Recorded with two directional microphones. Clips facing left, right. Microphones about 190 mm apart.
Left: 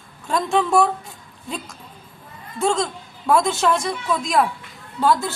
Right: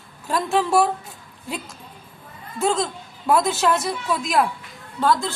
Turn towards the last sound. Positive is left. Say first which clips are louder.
# left 1 dB
turn(degrees=5)  # may be behind; listen again after turning